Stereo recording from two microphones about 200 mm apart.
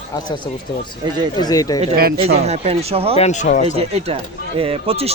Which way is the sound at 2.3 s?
30° right (ahead or behind).